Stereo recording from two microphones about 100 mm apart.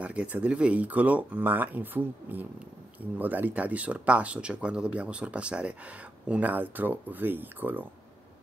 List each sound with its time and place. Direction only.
0.0 s speech: 15° right (ahead or behind)